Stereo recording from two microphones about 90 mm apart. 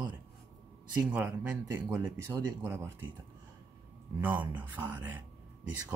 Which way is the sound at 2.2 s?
30° right (ahead or behind).